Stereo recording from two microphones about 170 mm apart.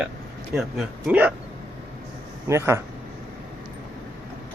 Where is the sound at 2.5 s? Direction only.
15° right (ahead or behind).